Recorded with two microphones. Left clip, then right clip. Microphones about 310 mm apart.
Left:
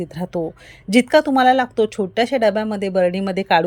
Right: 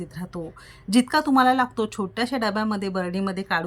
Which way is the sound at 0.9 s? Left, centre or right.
Centre.